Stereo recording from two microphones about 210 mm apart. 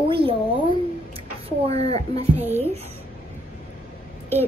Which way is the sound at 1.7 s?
30° right (ahead or behind).